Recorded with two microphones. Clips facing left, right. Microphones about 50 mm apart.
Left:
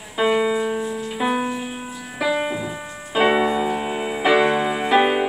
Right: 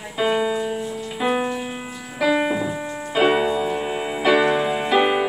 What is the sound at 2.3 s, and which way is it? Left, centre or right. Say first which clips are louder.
Music: right 3 dB; centre.